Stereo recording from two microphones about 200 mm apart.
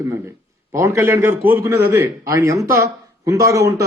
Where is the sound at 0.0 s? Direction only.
15° right (ahead or behind).